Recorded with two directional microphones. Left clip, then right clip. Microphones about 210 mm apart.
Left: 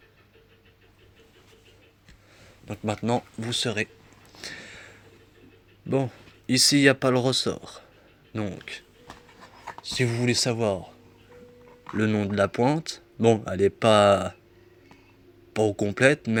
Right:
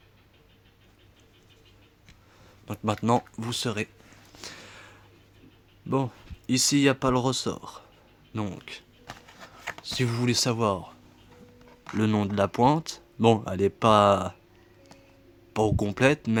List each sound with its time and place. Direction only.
2.6 s speech: 35° right (ahead or behind)
4.3 s a sound: 25° right (ahead or behind)
5.9 s speech: 20° right (ahead or behind)
9.8 s speech: 25° right (ahead or behind)
11.9 s speech: 30° right (ahead or behind)
15.5 s speech: 25° right (ahead or behind)